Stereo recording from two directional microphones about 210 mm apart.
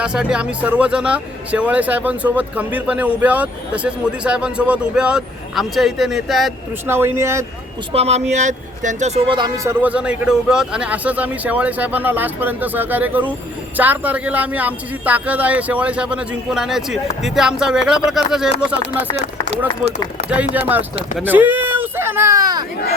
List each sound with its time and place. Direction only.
0.0 s a man's voice: 5° right (ahead or behind)
6.8 s a man's voice: 10° right (ahead or behind)
7.9 s speech: 30° right (ahead or behind)
9.6 s a man's voice: 5° right (ahead or behind)
20.3 s a man's voice: 5° right (ahead or behind)